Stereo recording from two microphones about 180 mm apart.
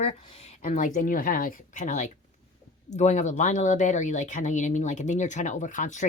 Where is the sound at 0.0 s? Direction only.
35° left (ahead or behind).